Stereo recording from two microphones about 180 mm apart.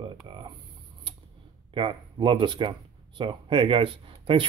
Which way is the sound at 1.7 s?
30° right (ahead or behind).